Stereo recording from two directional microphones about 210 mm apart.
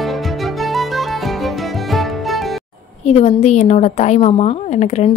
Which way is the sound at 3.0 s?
30° left (ahead or behind).